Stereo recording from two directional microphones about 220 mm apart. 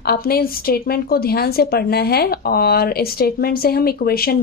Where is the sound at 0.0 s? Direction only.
45° left (ahead or behind).